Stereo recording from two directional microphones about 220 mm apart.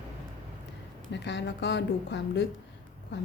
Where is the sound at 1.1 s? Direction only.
50° left (ahead or behind).